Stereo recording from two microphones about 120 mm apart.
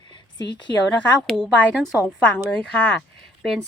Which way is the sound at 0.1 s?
40° left (ahead or behind).